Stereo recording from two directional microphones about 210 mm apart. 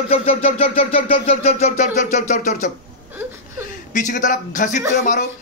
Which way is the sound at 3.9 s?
35° left (ahead or behind).